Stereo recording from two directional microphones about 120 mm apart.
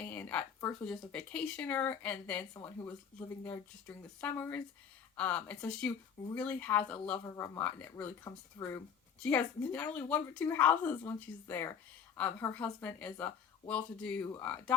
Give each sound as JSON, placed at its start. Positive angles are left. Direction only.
{"t": 0.0, "sound": "speech", "side_deg": 15}
{"t": 7.3, "sound": "speech", "side_deg": 25}
{"t": 9.2, "sound": "speech", "side_deg": 10}